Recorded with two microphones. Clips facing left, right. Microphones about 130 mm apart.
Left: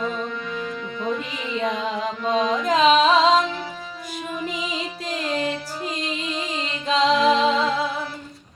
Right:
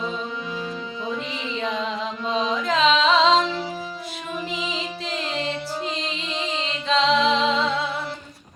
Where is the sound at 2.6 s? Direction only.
40° left (ahead or behind).